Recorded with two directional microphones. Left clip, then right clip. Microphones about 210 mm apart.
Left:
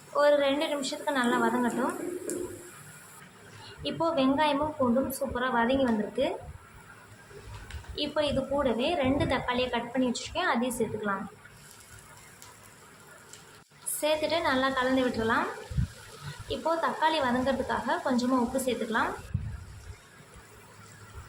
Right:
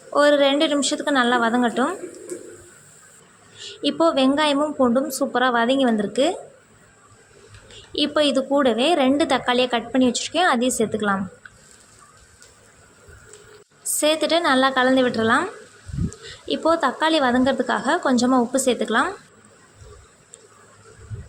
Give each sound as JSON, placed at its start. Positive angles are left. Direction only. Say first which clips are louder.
{"t": 0.1, "sound": "a woman's voice", "louder": "right 7 dB", "side_deg": -30}
{"t": 3.8, "sound": "a woman's voice", "louder": "right 9 dB", "side_deg": -30}
{"t": 7.9, "sound": "a woman's voice", "louder": "right 9 dB", "side_deg": -35}
{"t": 14.0, "sound": "a woman's voice", "louder": "right 8 dB", "side_deg": -35}
{"t": 16.5, "sound": "a woman's voice", "louder": "right 9 dB", "side_deg": -30}